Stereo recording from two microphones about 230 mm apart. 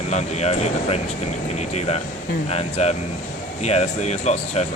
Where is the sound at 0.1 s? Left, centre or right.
Left.